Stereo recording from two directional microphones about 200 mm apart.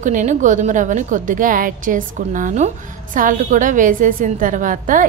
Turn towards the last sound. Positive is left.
turn(degrees=-40)  # may be behind; listen again after turning